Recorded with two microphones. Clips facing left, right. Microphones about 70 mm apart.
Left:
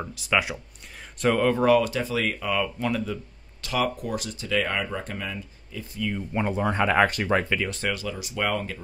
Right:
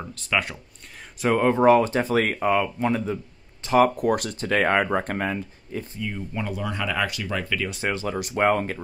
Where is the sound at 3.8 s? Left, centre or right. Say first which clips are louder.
Right 7 dB; right.